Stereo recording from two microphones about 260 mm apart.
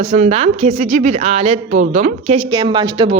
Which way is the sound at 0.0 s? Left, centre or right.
Right.